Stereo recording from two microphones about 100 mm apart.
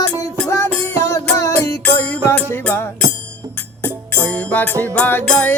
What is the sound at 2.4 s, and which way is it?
Music, 15° left (ahead or behind).